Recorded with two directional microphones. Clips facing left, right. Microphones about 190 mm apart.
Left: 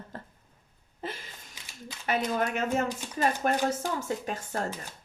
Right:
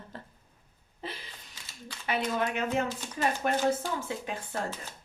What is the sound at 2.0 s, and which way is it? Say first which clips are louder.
Speech: left 2 dB; 45° left (ahead or behind).